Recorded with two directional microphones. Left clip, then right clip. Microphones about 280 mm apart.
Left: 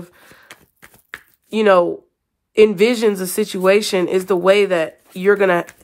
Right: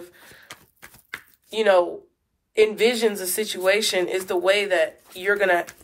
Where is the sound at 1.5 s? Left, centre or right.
Left.